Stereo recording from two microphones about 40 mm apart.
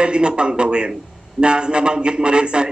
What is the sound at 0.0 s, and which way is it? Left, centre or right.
Speech, right.